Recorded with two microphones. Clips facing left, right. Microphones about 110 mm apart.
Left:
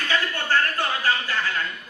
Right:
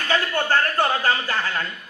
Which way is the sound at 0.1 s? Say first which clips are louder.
Right 3 dB; 40° right (ahead or behind).